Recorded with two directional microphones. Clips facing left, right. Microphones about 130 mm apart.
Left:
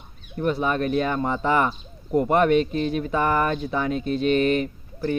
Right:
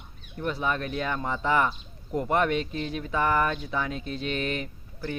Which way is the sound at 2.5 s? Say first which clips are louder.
Left 9 dB; 55° left (ahead or behind).